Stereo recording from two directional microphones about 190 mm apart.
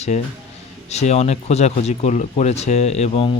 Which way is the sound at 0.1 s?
40° left (ahead or behind).